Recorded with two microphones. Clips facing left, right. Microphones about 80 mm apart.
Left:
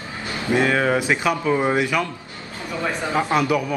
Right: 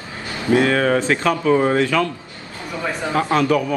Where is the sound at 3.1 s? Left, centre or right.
Centre.